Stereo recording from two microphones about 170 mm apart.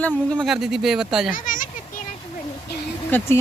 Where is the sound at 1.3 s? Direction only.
50° left (ahead or behind).